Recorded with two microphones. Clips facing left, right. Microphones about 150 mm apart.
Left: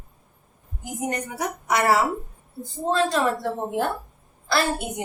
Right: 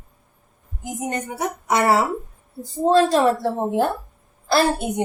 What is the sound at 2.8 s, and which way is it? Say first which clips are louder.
Speech: right 6 dB; 35° right (ahead or behind).